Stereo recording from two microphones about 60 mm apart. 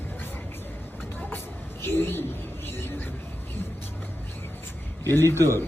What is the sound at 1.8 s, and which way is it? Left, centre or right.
Speech, left.